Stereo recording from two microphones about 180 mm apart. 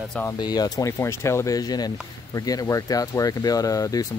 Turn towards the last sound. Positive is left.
turn(degrees=20)  # may be behind; listen again after turning